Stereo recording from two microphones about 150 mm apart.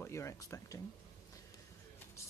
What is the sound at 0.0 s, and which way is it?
Speech, 20° left (ahead or behind).